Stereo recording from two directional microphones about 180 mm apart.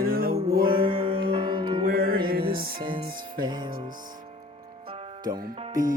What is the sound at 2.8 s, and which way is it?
Music, 25° right (ahead or behind).